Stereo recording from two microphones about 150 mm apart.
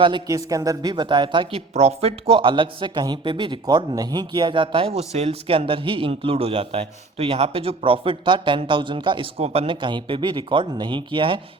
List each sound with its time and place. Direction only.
0.0 s speech: 30° right (ahead or behind)